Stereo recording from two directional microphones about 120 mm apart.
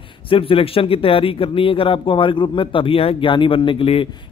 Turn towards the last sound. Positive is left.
turn(degrees=50)  # may be behind; listen again after turning